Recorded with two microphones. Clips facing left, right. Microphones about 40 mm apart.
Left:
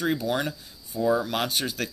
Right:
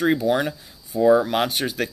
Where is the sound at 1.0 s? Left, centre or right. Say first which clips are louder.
Right 8 dB; right.